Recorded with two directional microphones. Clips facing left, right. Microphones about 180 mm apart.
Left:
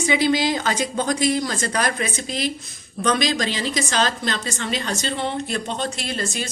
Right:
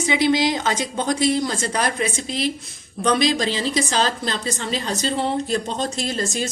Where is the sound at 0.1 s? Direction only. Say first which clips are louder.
Right 1 dB; 20° right (ahead or behind).